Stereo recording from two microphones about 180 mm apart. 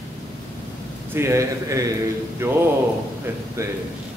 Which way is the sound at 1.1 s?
15° right (ahead or behind).